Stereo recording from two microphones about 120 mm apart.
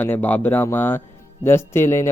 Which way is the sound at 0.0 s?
15° left (ahead or behind).